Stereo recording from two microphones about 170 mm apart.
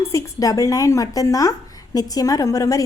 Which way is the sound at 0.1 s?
20° left (ahead or behind).